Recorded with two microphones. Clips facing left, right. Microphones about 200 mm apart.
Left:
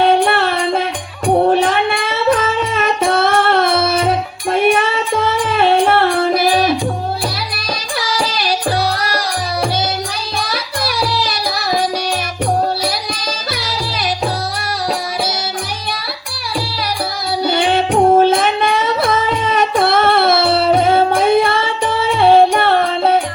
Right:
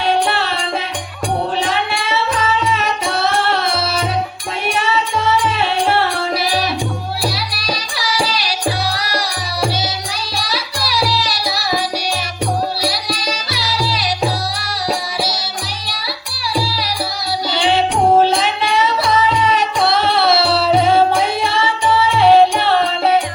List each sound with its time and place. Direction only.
0.0 s music: 55° left (ahead or behind)
7.9 s music: 55° left (ahead or behind)
10.3 s music: 55° left (ahead or behind)
12.8 s music: 55° left (ahead or behind)
17.4 s music: 50° left (ahead or behind)